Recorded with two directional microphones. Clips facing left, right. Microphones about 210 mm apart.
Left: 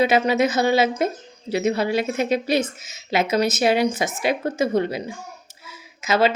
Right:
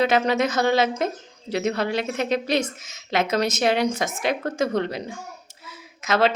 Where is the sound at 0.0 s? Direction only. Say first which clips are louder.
Left 2 dB; 5° left (ahead or behind).